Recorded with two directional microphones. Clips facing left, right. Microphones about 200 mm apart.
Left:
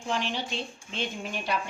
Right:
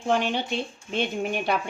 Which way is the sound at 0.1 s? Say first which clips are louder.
Right 6 dB; 55° right (ahead or behind).